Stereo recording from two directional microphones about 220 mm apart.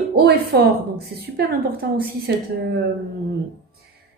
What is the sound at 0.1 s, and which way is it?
A woman's voice, 45° right (ahead or behind).